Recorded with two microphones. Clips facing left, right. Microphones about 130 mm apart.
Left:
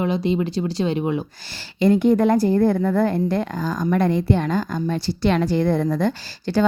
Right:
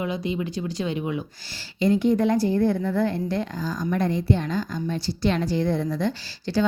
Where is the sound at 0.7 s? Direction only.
30° left (ahead or behind).